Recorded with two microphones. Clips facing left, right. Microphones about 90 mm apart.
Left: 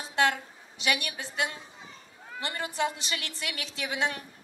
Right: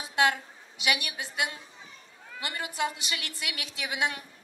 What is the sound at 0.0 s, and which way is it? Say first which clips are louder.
A woman's voice: even; 10° right (ahead or behind).